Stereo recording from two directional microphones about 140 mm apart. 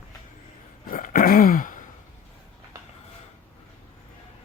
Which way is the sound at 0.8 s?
75° left (ahead or behind).